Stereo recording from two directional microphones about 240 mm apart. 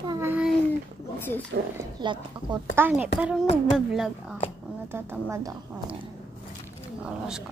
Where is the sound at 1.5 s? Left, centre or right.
Right.